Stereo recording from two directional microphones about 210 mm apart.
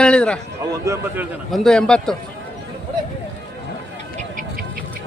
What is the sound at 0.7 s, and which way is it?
Speech, 15° right (ahead or behind).